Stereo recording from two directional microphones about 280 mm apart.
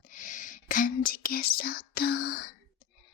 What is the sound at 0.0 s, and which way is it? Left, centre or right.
Speech, left.